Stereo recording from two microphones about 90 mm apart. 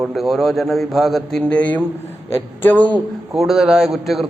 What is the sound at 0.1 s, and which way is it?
Speech, centre (ahead or behind).